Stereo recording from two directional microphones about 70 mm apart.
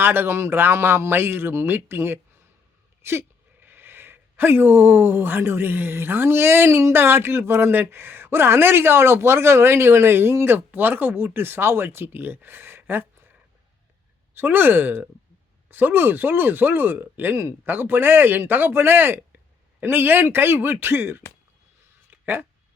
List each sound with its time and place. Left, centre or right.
0.0 s speech: right
14.3 s speech: right
22.1 s a sound: right